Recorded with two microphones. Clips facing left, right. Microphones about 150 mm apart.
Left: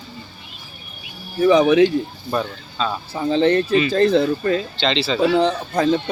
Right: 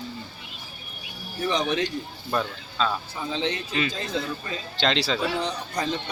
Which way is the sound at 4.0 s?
60° left (ahead or behind).